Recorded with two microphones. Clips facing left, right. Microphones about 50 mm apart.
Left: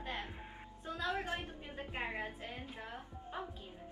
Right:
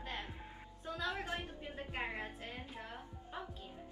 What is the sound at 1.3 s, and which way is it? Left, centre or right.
Speech, left.